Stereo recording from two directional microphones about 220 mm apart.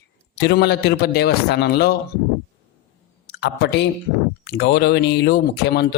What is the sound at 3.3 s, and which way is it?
Speech, 50° left (ahead or behind).